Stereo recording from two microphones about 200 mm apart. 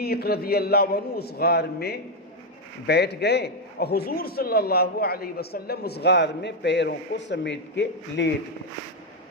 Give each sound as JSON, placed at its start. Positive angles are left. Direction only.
{"t": 0.0, "sound": "a man's voice", "side_deg": 50}